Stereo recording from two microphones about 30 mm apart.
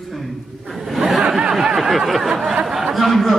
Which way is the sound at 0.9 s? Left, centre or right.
Centre.